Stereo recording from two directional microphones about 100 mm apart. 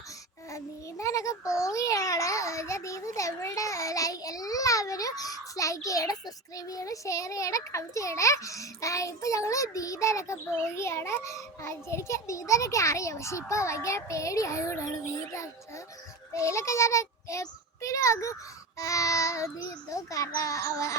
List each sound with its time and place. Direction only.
0.5 s a child's voice: 30° left (ahead or behind)